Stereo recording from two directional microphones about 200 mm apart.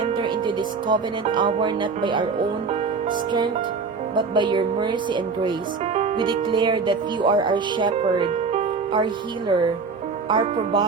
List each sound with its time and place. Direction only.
0.0 s music: 25° right (ahead or behind)
3.1 s speech: 25° right (ahead or behind)
6.1 s speech: 25° right (ahead or behind)
10.2 s speech: 25° right (ahead or behind)